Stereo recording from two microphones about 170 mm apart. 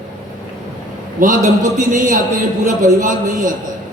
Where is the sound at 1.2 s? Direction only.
55° right (ahead or behind).